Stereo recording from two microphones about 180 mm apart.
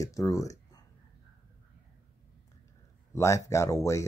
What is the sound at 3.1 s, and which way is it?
Speech, 15° left (ahead or behind).